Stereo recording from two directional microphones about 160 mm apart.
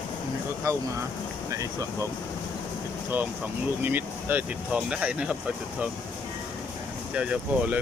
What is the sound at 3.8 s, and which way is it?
Speech, 10° right (ahead or behind).